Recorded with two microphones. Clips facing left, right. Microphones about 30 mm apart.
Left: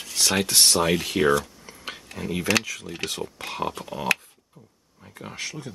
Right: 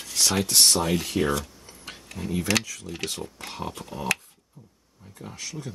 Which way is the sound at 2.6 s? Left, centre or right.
Left.